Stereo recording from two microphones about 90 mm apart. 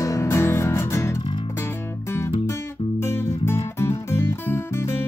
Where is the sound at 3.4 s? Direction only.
30° left (ahead or behind).